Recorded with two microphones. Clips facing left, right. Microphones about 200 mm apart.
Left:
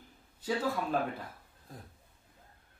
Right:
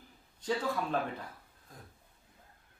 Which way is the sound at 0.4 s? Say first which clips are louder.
Even; 5° left (ahead or behind).